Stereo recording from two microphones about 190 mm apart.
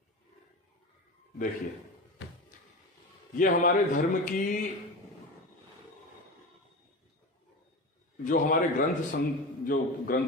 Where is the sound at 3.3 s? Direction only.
45° left (ahead or behind).